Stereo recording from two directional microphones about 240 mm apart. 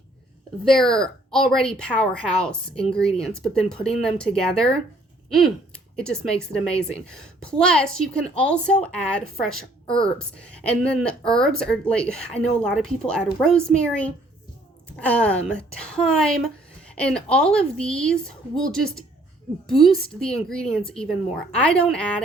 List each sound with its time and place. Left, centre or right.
0.6 s speech: centre